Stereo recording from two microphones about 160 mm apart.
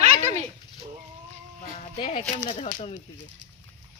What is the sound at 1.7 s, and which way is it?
Speech, 35° left (ahead or behind).